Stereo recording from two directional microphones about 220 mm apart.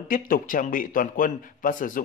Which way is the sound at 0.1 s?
40° left (ahead or behind).